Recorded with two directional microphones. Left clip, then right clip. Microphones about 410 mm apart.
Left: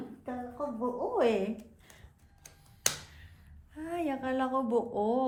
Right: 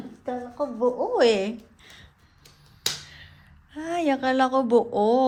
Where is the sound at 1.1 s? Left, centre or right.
Right.